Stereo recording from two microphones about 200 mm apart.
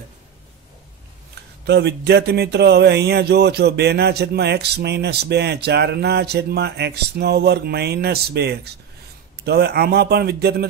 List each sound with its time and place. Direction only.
1.7 s speech: 55° right (ahead or behind)